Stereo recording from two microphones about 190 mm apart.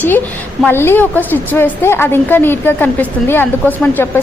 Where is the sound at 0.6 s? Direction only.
10° left (ahead or behind).